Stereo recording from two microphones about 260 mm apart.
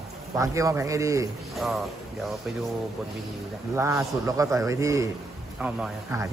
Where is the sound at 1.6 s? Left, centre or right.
Centre.